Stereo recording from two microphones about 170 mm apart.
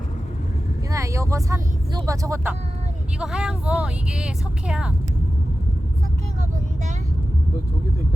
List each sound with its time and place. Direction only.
0.9 s speech: 20° right (ahead or behind)
3.2 s speech: 5° right (ahead or behind)